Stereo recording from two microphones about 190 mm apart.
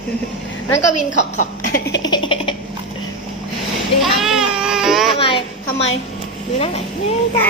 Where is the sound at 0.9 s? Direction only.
40° left (ahead or behind).